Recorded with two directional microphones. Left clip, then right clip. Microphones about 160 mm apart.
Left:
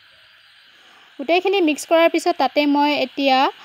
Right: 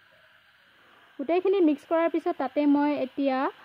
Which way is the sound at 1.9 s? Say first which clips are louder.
Left 10 dB; 35° left (ahead or behind).